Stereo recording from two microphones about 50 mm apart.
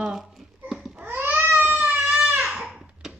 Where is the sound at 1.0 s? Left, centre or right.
Right.